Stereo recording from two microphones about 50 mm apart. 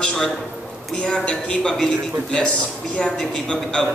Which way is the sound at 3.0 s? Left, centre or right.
Centre.